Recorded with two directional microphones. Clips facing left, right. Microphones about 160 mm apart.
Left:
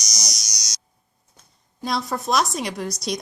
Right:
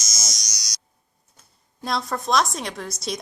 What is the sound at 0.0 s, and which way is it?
Electric shaver, centre (ahead or behind).